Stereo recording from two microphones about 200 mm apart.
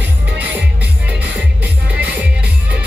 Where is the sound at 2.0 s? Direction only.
5° right (ahead or behind).